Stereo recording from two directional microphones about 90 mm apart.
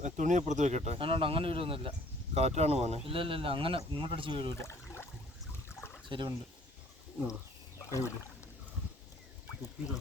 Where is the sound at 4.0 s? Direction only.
75° right (ahead or behind).